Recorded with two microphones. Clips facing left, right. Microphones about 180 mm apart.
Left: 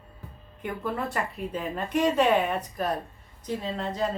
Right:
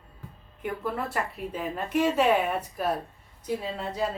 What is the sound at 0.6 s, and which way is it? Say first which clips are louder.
A woman's voice: even; 5° right (ahead or behind).